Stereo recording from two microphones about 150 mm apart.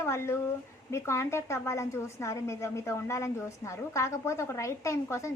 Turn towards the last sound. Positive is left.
turn(degrees=20)  # may be behind; listen again after turning